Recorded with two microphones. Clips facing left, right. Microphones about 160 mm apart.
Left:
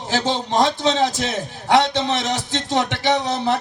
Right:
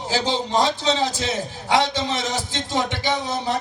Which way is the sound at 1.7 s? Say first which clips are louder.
Left 4 dB; 65° left (ahead or behind).